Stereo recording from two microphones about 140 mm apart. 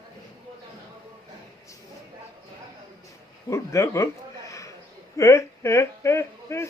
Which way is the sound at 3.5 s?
20° left (ahead or behind).